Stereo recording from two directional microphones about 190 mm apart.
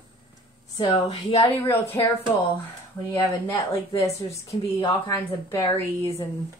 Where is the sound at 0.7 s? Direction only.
30° left (ahead or behind).